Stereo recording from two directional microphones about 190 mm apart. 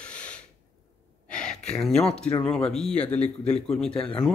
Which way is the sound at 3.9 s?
25° left (ahead or behind).